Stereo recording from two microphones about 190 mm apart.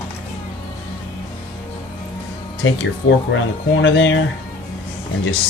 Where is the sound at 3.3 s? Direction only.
75° left (ahead or behind).